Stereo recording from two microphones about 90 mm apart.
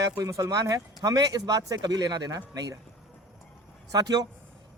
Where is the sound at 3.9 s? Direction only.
45° right (ahead or behind).